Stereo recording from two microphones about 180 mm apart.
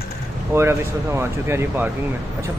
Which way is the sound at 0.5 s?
15° right (ahead or behind).